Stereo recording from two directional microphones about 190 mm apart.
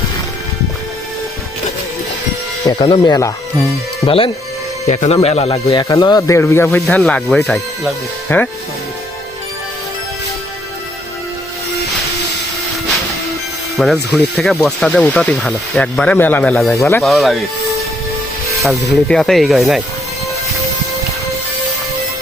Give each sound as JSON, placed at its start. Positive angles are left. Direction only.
{"t": 2.6, "sound": "speech", "side_deg": 20}
{"t": 4.0, "sound": "speech", "side_deg": 30}
{"t": 5.6, "sound": "speech", "side_deg": 20}
{"t": 13.7, "sound": "speech", "side_deg": 0}
{"t": 17.1, "sound": "speech", "side_deg": 0}
{"t": 18.6, "sound": "speech", "side_deg": 0}